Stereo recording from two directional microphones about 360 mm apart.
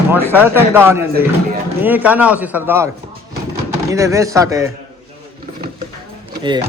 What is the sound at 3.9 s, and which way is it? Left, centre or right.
Speech, centre.